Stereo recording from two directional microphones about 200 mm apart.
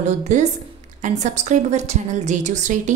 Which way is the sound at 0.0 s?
35° right (ahead or behind).